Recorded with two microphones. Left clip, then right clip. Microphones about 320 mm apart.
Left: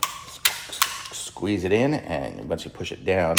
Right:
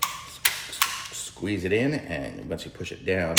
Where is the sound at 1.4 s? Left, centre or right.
Centre.